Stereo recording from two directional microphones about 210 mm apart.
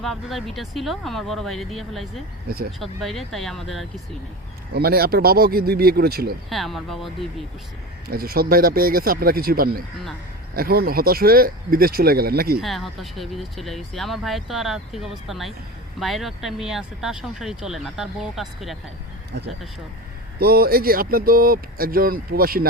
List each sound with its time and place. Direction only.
0.0 s speech: centre (ahead or behind)
4.7 s speech: 45° right (ahead or behind)
6.5 s speech: centre (ahead or behind)
8.0 s speech: 45° right (ahead or behind)
12.6 s speech: centre (ahead or behind)
20.4 s speech: 45° right (ahead or behind)